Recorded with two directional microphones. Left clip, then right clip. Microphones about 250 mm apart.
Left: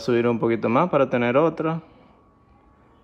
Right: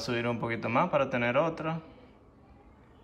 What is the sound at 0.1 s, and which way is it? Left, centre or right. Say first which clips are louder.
Speech: left 11 dB; left.